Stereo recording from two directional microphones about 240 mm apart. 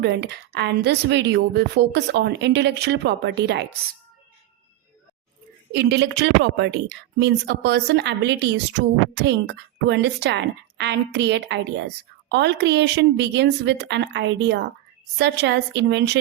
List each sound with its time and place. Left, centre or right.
0.0 s a woman's voice: right
5.7 s a woman's voice: right